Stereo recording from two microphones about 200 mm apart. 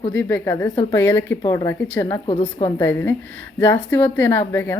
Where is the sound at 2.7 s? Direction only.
10° left (ahead or behind).